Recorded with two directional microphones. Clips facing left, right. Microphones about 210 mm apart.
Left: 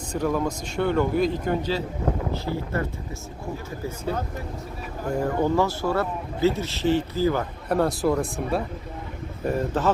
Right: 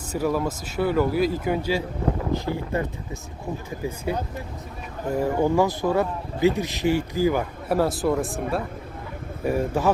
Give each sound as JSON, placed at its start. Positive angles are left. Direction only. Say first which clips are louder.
{"t": 0.1, "sound": "speech", "louder": "right 1 dB", "side_deg": -5}
{"t": 3.8, "sound": "speech", "louder": "right 2 dB", "side_deg": -15}
{"t": 5.2, "sound": "speech", "louder": "right 2 dB", "side_deg": -15}